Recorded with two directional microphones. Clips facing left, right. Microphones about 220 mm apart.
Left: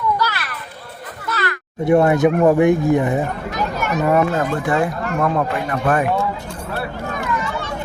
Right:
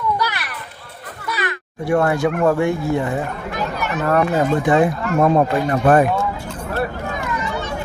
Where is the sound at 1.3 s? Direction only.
15° right (ahead or behind).